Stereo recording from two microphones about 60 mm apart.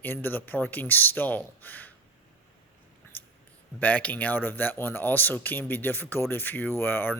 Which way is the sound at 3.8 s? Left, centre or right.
Left.